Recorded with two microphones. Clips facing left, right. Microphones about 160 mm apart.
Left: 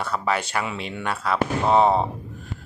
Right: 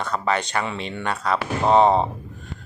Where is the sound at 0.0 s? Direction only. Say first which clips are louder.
Right 1 dB; 5° left (ahead or behind).